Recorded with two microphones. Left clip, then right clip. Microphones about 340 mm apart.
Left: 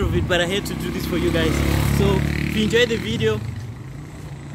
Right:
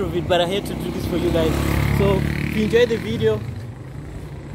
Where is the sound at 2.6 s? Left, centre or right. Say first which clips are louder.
Right 1 dB; centre.